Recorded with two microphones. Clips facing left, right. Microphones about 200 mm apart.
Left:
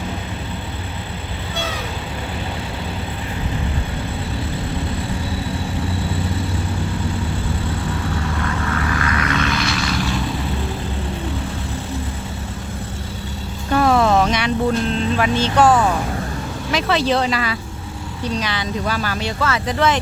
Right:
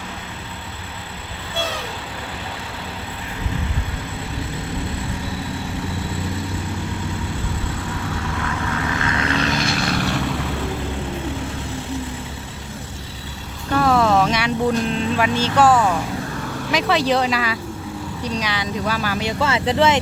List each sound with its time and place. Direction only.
8.9 s vehicle: 25° right (ahead or behind); by 10.2 s 65° right (ahead or behind)
13.7 s vehicle: 5° left (ahead or behind)
15.5 s speech: 5° right (ahead or behind)
19.4 s speech: 25° right (ahead or behind)